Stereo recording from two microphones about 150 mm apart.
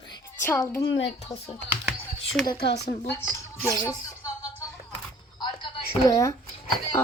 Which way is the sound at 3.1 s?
15° left (ahead or behind).